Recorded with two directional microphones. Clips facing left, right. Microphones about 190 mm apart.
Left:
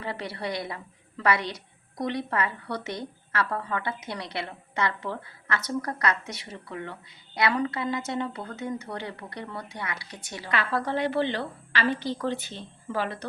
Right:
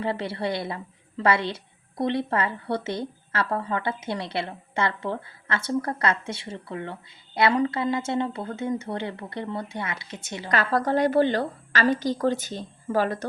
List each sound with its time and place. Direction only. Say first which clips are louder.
0.0 s a woman's voice: right 5 dB; 30° right (ahead or behind)
10.5 s a woman's voice: right 5 dB; 40° right (ahead or behind)